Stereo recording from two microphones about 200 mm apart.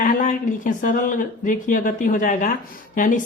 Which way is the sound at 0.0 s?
40° left (ahead or behind).